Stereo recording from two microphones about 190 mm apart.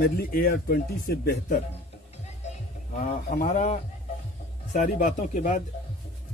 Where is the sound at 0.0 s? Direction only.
50° left (ahead or behind).